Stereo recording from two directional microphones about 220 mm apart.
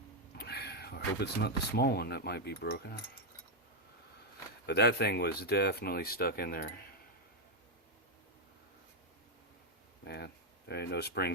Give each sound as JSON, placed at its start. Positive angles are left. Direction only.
{"t": 0.3, "sound": "speech", "side_deg": 45}
{"t": 4.6, "sound": "speech", "side_deg": 50}
{"t": 10.0, "sound": "speech", "side_deg": 45}